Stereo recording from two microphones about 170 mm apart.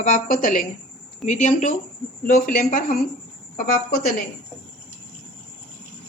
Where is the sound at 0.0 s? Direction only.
50° left (ahead or behind).